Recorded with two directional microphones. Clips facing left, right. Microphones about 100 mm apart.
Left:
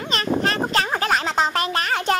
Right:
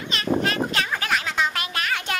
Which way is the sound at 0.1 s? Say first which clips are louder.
Left 1 dB; 40° left (ahead or behind).